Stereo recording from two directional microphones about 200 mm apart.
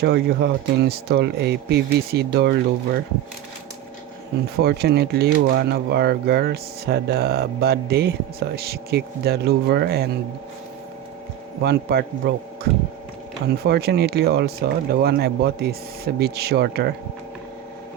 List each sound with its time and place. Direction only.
0.0 s speech: 50° right (ahead or behind)
4.5 s speech: 50° right (ahead or behind)
11.6 s speech: 55° right (ahead or behind)
13.6 s speech: 55° right (ahead or behind)